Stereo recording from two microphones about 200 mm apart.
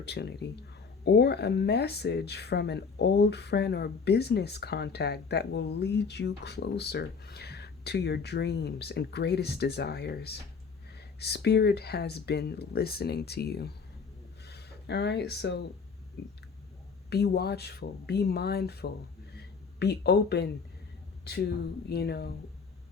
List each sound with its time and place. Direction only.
0.0 s speech: 55° left (ahead or behind)
17.1 s speech: 55° left (ahead or behind)
21.8 s speech: 55° left (ahead or behind)